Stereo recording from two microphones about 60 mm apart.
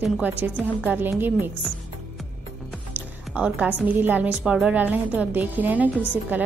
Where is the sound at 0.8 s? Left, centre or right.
Right.